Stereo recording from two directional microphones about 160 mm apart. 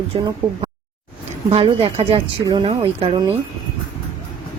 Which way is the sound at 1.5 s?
35° right (ahead or behind).